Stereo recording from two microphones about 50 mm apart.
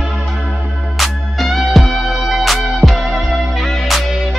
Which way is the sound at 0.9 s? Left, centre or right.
Centre.